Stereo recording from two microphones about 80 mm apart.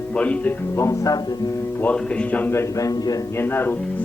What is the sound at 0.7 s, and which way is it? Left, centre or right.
Speech, left.